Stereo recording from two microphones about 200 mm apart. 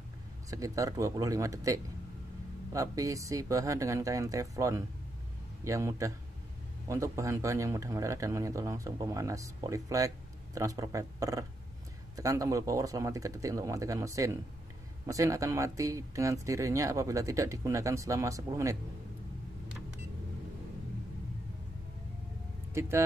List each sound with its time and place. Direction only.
0.5 s speech: 15° right (ahead or behind)
22.8 s speech: 15° right (ahead or behind)